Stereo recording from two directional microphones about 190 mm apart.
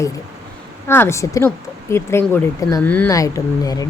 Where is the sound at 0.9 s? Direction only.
15° left (ahead or behind).